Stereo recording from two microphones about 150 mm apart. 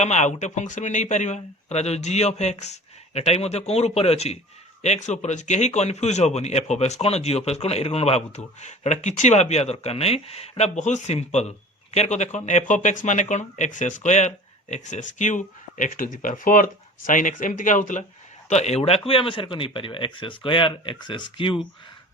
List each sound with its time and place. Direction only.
0.0 s a man's voice: 50° left (ahead or behind)
18.4 s speech: 45° left (ahead or behind)